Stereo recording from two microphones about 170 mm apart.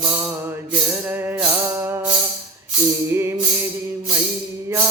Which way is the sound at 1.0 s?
10° right (ahead or behind).